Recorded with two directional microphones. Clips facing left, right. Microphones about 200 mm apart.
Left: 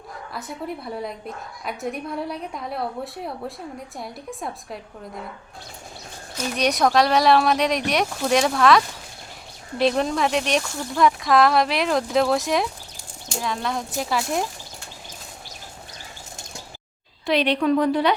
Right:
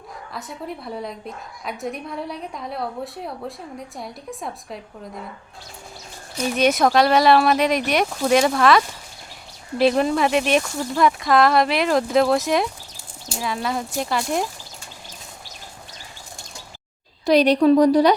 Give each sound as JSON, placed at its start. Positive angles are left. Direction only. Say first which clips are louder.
{"t": 0.3, "sound": "speech", "louder": "left 1 dB", "side_deg": 0}
{"t": 6.6, "sound": "speech", "louder": "right 2 dB", "side_deg": 0}
{"t": 17.2, "sound": "a woman's voice", "louder": "right 6 dB", "side_deg": -40}